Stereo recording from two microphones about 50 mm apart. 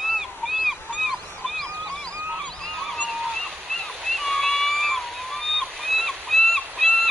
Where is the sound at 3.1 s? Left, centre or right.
Centre.